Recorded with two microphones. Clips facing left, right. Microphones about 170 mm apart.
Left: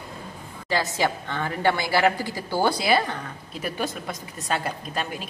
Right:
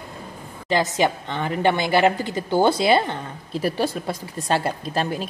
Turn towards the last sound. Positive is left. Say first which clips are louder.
# right 6 dB
turn(degrees=-30)  # may be behind; listen again after turning